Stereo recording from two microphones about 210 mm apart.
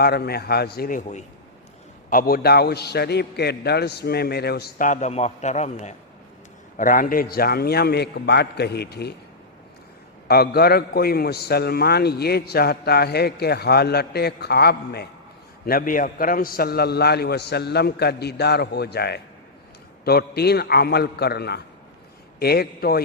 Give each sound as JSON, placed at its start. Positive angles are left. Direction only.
{"t": 0.0, "sound": "a man's voice", "side_deg": 50}
{"t": 10.2, "sound": "a man's voice", "side_deg": 50}